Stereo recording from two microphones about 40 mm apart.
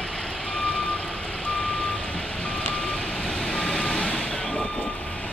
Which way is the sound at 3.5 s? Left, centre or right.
Centre.